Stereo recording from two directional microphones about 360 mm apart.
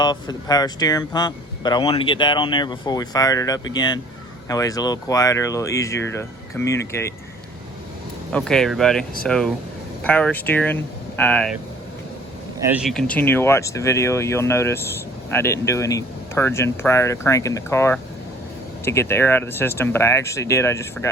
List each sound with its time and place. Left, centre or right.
0.0 s speech: centre
8.3 s speech: centre
12.6 s speech: centre